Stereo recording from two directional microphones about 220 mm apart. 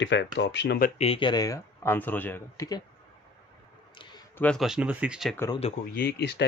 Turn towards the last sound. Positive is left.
turn(degrees=50)  # may be behind; listen again after turning